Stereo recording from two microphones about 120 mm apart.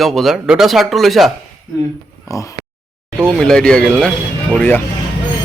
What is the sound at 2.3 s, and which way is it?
Speech, 25° left (ahead or behind).